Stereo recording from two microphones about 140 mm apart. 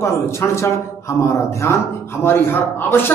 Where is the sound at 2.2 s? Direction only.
15° left (ahead or behind).